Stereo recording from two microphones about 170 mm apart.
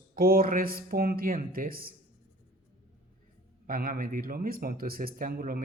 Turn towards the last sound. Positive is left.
turn(degrees=-60)  # may be behind; listen again after turning